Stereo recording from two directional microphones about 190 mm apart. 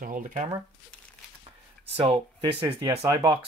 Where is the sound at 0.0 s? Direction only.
45° right (ahead or behind).